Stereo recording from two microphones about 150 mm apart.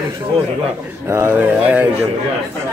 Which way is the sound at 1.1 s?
15° right (ahead or behind).